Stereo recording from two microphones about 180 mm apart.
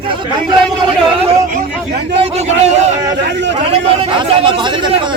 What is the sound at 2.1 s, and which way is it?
A man's voice, 35° right (ahead or behind).